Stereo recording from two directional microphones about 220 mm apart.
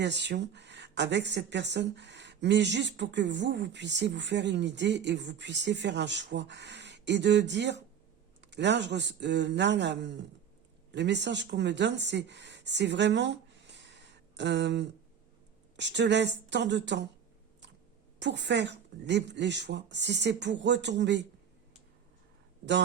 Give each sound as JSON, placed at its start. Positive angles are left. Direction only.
{"t": 0.0, "sound": "speech", "side_deg": -50}
{"t": 18.2, "sound": "speech", "side_deg": -55}